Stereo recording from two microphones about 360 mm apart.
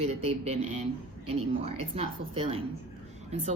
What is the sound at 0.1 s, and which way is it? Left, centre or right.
Speech, right.